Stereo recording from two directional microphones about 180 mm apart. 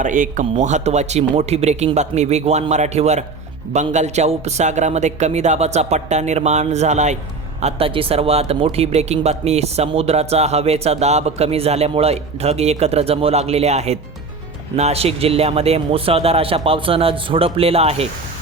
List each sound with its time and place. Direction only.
0.0 s speech: 45° right (ahead or behind)